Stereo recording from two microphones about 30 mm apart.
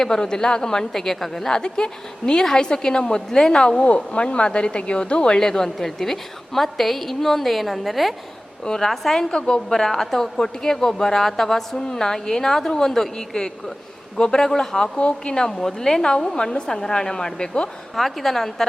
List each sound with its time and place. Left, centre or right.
0.0 s speech: left
0.9 s a woman's voice: centre
1.5 s speech: left
3.2 s a woman's voice: centre
3.5 s a woman's voice: left
5.4 s a woman's voice: centre
8.6 s a woman's voice: left
9.3 s a woman's voice: left
14.9 s a woman's voice: left
15.4 s a woman's voice: centre
16.0 s speech: left
17.9 s a woman's voice: centre